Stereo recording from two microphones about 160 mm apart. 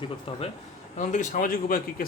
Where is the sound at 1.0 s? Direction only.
55° left (ahead or behind).